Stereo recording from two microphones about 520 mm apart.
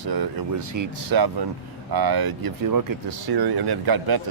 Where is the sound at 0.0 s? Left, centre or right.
Right.